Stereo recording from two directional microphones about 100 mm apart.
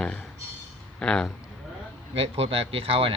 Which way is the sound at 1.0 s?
10° left (ahead or behind).